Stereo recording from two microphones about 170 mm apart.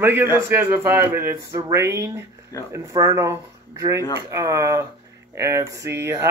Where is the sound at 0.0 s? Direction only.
15° right (ahead or behind).